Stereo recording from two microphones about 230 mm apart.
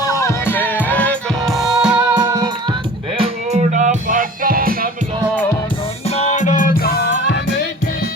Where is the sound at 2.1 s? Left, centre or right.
Centre; by 4.9 s right.